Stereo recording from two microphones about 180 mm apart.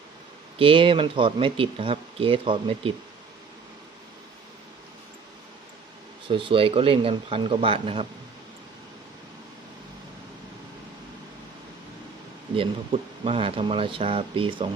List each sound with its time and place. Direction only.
0.6 s speech: 30° right (ahead or behind)
6.2 s speech: 30° right (ahead or behind)
12.5 s speech: 30° right (ahead or behind)